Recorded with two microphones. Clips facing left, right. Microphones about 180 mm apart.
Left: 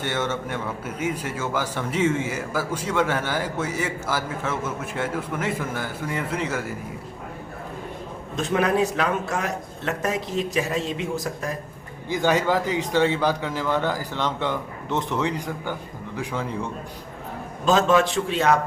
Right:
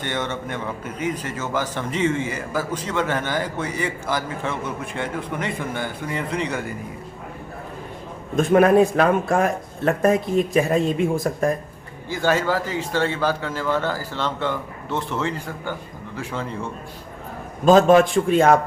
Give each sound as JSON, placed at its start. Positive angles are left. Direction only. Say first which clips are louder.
{"t": 0.0, "sound": "a man's voice", "louder": "even", "side_deg": 5}
{"t": 8.4, "sound": "speech", "louder": "right 7 dB", "side_deg": -50}
{"t": 12.0, "sound": "a man's voice", "louder": "even", "side_deg": 15}
{"t": 17.7, "sound": "speech", "louder": "right 6 dB", "side_deg": -50}